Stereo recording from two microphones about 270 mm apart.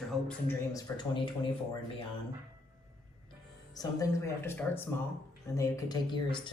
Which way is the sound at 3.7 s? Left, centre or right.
Centre.